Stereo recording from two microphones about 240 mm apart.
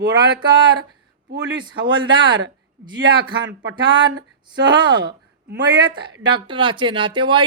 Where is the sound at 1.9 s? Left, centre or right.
Centre.